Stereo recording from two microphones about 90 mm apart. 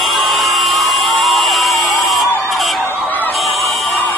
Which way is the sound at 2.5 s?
Centre (ahead or behind).